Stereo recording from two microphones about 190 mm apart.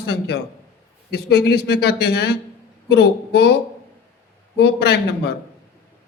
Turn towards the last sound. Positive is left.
turn(degrees=60)  # may be behind; listen again after turning